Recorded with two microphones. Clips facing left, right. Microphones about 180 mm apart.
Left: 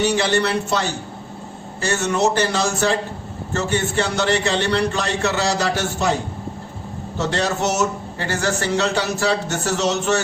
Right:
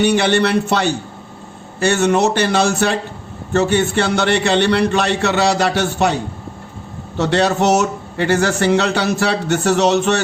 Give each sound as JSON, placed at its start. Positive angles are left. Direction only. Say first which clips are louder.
{"t": 0.0, "sound": "a man's voice", "louder": "right 4 dB", "side_deg": -65}
{"t": 7.2, "sound": "a man's voice", "louder": "right 6 dB", "side_deg": -70}